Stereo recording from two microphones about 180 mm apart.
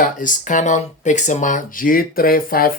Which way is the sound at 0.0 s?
45° left (ahead or behind).